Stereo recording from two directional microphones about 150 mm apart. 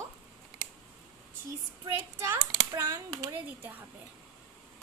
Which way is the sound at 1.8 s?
20° right (ahead or behind).